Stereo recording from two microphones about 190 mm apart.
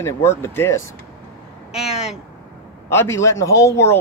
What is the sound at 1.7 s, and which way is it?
Speech, 5° right (ahead or behind).